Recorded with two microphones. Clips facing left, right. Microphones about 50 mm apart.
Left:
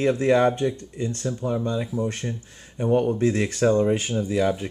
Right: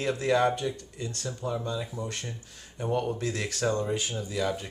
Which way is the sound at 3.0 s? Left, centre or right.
Left.